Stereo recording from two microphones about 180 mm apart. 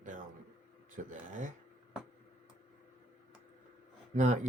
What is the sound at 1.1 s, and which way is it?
Speech, 45° right (ahead or behind).